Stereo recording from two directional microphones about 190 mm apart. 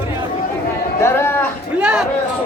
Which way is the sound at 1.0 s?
15° left (ahead or behind).